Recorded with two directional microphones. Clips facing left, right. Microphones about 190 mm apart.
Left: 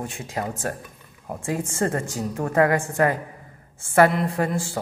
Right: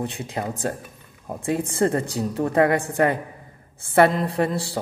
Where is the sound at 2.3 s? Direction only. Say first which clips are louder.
Right 1 dB; 30° right (ahead or behind).